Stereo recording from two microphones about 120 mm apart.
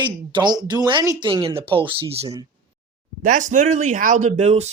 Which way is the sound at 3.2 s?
90° right.